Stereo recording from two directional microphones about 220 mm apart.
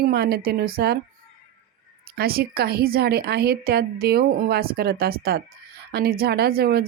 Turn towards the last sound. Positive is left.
turn(degrees=-45)  # may be behind; listen again after turning